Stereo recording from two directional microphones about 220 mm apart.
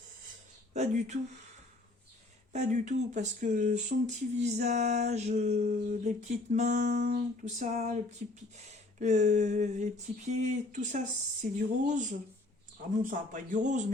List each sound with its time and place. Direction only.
0.7 s speech: 30° right (ahead or behind)
2.5 s speech: 30° right (ahead or behind)
6.9 s speech: 50° right (ahead or behind)
7.4 s speech: 30° right (ahead or behind)